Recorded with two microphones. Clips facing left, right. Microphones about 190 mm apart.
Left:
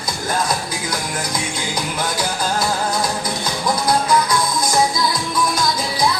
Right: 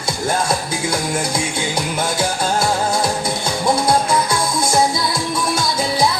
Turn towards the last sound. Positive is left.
turn(degrees=-25)  # may be behind; listen again after turning